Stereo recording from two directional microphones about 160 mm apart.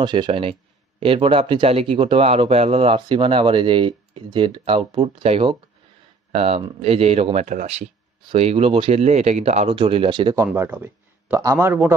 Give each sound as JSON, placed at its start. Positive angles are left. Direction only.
{"t": 0.0, "sound": "speech", "side_deg": -30}